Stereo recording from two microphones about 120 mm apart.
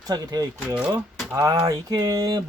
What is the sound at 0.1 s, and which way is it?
Speech, 35° right (ahead or behind).